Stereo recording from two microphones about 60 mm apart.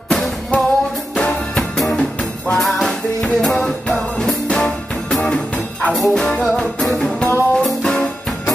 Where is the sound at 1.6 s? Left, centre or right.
Centre.